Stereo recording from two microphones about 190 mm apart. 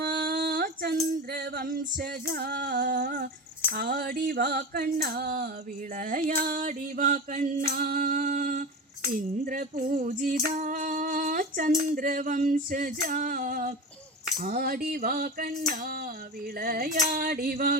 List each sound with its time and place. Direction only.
0.0 s female singing: 55° right (ahead or behind)
3.8 s music: 50° right (ahead or behind)